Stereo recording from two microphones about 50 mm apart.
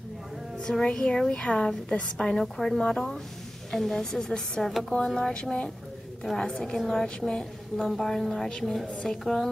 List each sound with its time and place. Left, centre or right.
0.6 s a woman's voice: centre
4.6 s speech: centre
4.9 s a woman's voice: centre
6.2 s a woman's voice: centre